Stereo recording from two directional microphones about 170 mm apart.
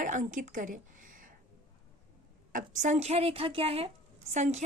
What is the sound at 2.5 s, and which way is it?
Speech, 50° right (ahead or behind).